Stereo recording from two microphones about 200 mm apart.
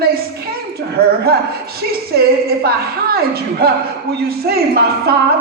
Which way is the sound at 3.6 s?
50° right (ahead or behind).